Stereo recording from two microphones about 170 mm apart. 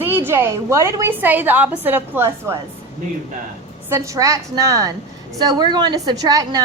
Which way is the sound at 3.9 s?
20° right (ahead or behind).